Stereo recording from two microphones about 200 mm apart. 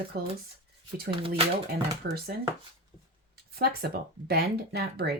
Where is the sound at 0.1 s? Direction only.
50° right (ahead or behind).